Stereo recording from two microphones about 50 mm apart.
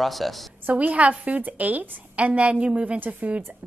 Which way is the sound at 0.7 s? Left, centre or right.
Right.